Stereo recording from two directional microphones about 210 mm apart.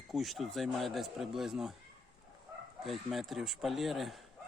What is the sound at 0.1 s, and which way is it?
Speech, centre (ahead or behind).